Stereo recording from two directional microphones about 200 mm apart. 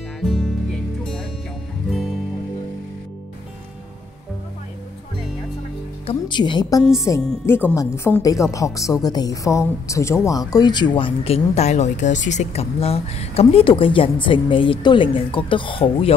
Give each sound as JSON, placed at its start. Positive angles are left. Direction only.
{"t": 0.2, "sound": "music", "side_deg": 0}
{"t": 6.0, "sound": "a woman's voice", "side_deg": 25}